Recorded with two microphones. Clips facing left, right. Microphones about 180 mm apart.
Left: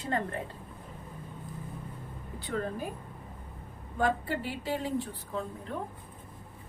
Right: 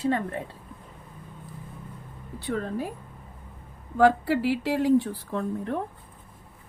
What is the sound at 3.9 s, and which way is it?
Speech, 85° right.